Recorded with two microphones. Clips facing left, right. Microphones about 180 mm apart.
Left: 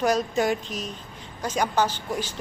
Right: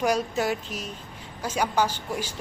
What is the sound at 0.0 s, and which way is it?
A woman's voice, 10° right (ahead or behind).